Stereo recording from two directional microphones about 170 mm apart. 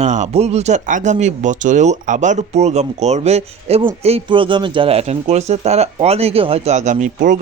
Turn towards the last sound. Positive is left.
turn(degrees=-50)  # may be behind; listen again after turning